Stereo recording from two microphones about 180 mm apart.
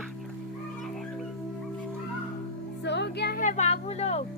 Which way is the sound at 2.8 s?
75° left (ahead or behind).